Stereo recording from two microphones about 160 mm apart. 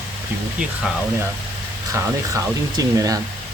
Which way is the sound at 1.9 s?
15° right (ahead or behind).